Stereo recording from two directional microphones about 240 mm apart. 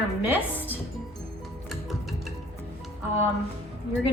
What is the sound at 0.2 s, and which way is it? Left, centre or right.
Speech, centre.